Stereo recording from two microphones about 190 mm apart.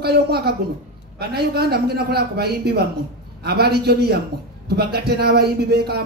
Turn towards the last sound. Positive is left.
turn(degrees=-55)  # may be behind; listen again after turning